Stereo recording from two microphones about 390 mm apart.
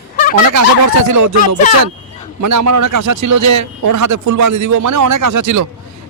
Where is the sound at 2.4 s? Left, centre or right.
Right.